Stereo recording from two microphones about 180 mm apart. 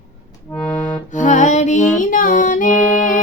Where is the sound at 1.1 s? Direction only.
45° left (ahead or behind).